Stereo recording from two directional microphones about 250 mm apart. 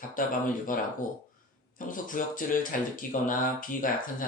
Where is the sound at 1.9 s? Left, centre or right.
Left.